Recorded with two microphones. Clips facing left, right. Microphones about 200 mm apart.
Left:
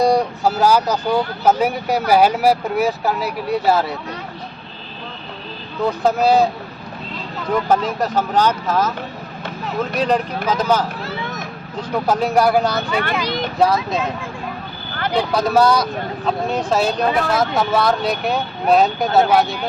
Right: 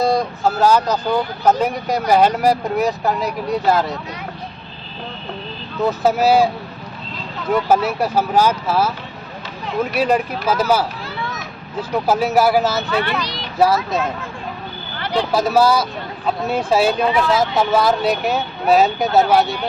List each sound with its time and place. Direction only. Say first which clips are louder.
0.0 s speech: left 2 dB; 15° left (ahead or behind)
5.8 s speech: right 1 dB; 5° right (ahead or behind)
7.5 s speech: right 1 dB; 5° right (ahead or behind)
13.2 s vehicle: left 7 dB; 50° left (ahead or behind)
13.6 s speech: right 2 dB; 5° right (ahead or behind)
15.4 s speech: even; 5° right (ahead or behind)